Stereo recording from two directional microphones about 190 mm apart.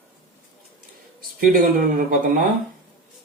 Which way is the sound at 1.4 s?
45° right (ahead or behind).